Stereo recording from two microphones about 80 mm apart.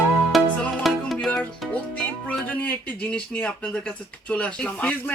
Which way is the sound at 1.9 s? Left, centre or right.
Centre.